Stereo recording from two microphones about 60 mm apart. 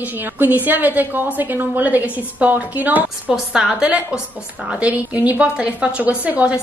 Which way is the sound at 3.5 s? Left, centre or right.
Centre.